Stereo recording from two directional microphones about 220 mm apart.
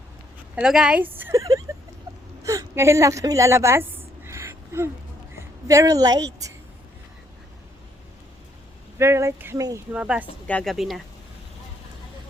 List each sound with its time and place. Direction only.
0.5 s a woman's voice: 5° right (ahead or behind)
4.3 s a sound: 10° right (ahead or behind)
5.6 s a woman's voice: 15° right (ahead or behind)
9.0 s a woman's voice: 10° right (ahead or behind)
10.4 s a woman's voice: 5° left (ahead or behind)